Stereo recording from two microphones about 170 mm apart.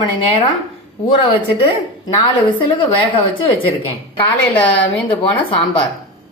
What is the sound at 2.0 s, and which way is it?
A woman's voice, 25° left (ahead or behind).